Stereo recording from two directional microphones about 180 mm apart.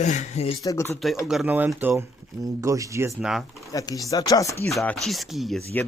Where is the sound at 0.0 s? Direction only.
40° left (ahead or behind).